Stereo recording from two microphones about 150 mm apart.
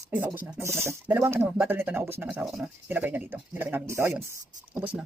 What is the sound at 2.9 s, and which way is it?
Speech, 10° right (ahead or behind).